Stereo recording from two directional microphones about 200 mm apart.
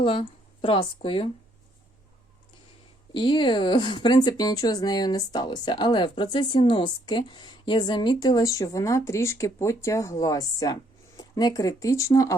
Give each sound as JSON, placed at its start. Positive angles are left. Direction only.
{"t": 0.0, "sound": "speech", "side_deg": 25}
{"t": 3.1, "sound": "a woman's voice", "side_deg": 25}